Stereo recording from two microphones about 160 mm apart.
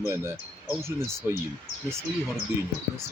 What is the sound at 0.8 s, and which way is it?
Speech, 15° right (ahead or behind).